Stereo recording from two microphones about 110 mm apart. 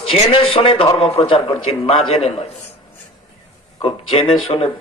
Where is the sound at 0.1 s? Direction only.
55° left (ahead or behind).